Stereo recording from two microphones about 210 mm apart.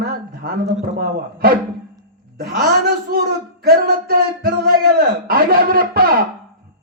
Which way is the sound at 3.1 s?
45° right (ahead or behind).